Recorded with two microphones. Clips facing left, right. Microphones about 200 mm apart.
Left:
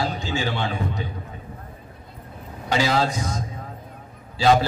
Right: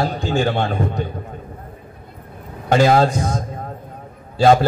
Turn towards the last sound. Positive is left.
turn(degrees=-50)  # may be behind; listen again after turning